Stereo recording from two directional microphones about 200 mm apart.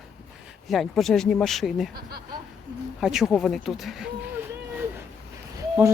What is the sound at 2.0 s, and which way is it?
Speech, 50° right (ahead or behind).